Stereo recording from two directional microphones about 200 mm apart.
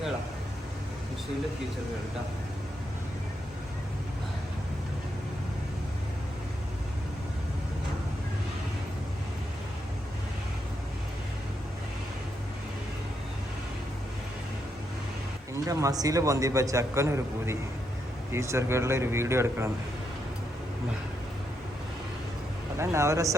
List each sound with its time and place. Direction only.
15.6 s a man's voice: 15° right (ahead or behind)
22.8 s a man's voice: 15° right (ahead or behind)